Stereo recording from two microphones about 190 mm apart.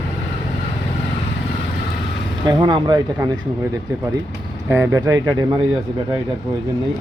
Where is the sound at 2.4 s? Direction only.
20° right (ahead or behind).